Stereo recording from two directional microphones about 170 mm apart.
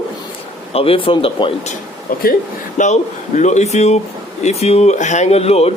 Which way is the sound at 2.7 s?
45° left (ahead or behind).